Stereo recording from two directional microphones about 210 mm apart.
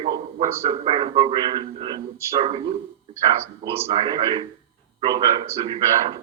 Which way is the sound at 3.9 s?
20° right (ahead or behind).